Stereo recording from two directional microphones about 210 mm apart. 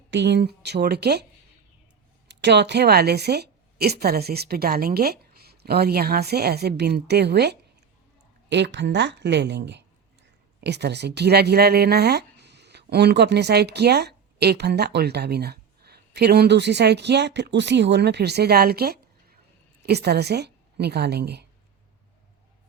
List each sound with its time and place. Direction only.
0.1 s a woman's voice: 55° right (ahead or behind)
2.2 s a woman's voice: 55° right (ahead or behind)